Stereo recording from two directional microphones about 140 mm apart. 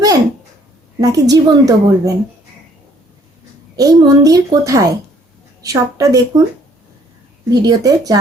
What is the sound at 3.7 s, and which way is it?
A woman's voice, 25° right (ahead or behind).